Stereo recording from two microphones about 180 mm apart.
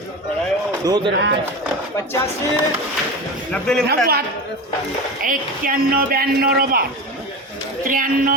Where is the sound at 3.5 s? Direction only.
5° left (ahead or behind).